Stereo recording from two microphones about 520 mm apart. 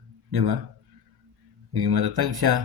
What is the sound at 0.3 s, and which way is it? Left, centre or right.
Speech, right.